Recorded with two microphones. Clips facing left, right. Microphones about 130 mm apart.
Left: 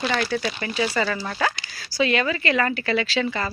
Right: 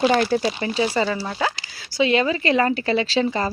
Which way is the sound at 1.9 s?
25° right (ahead or behind).